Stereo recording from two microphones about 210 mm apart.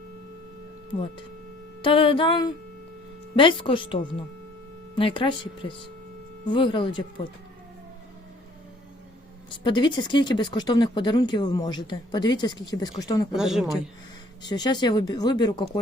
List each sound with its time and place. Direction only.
1.8 s speech: 25° left (ahead or behind)
9.5 s speech: 20° left (ahead or behind)
13.3 s a woman's voice: centre (ahead or behind)
14.4 s speech: 20° left (ahead or behind)